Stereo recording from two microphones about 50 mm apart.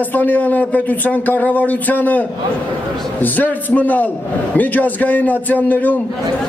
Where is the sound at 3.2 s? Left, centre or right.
Left.